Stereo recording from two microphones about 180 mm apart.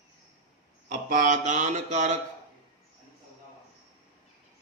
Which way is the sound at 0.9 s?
45° right (ahead or behind).